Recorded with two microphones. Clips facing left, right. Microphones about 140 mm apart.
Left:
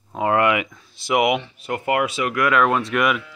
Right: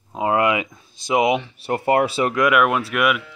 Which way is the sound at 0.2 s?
20° right (ahead or behind).